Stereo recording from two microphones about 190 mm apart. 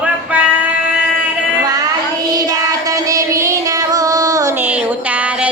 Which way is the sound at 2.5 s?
20° right (ahead or behind).